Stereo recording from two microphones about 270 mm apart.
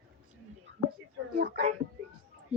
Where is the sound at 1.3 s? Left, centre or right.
Right.